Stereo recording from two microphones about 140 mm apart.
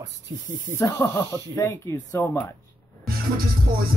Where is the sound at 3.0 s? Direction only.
90° right.